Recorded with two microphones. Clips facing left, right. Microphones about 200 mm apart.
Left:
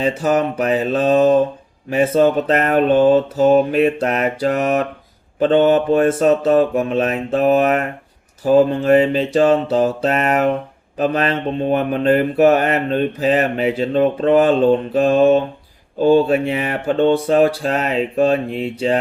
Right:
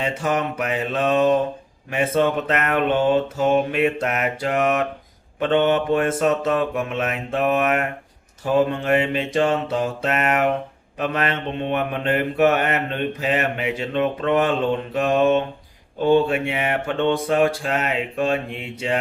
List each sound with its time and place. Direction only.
0.0 s speech: 35° left (ahead or behind)